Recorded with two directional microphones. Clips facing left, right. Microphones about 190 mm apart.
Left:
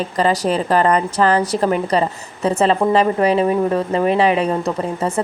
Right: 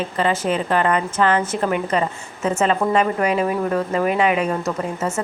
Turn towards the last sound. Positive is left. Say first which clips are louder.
# left 3 dB
turn(degrees=30)  # may be behind; listen again after turning